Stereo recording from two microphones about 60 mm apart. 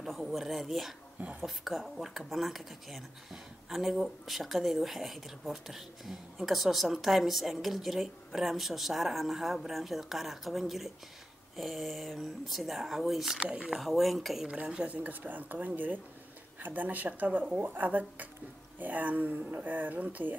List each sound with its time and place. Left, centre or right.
0.0 s speech: centre
13.4 s speech: centre
13.7 s speech: centre
14.5 s speech: centre
14.9 s speech: right